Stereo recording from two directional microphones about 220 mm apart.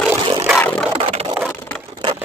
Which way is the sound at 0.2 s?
20° right (ahead or behind).